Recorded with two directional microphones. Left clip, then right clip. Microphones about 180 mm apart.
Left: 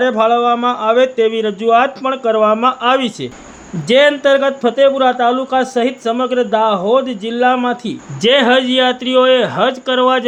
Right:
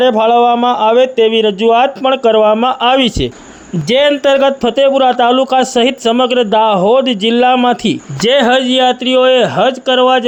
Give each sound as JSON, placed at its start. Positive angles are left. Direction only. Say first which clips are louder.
{"t": 0.0, "sound": "speech", "louder": "right 4 dB", "side_deg": -25}